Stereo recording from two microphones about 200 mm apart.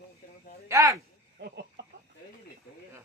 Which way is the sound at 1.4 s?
60° right (ahead or behind).